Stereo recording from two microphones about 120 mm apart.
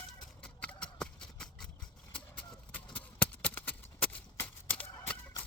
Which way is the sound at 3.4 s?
15° left (ahead or behind).